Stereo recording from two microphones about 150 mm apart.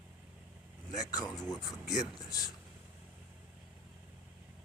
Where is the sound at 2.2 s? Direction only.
25° left (ahead or behind).